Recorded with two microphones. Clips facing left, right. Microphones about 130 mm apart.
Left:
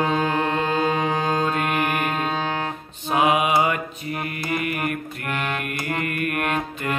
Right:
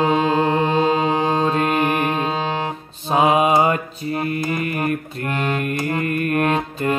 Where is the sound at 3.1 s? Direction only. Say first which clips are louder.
Right 4 dB; 30° right (ahead or behind).